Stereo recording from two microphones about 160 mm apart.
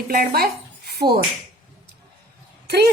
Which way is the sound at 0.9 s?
75° right (ahead or behind).